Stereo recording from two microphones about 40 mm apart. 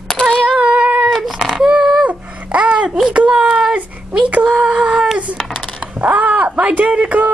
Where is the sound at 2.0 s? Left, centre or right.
Right.